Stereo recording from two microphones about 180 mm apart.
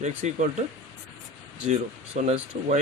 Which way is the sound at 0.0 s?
40° right (ahead or behind).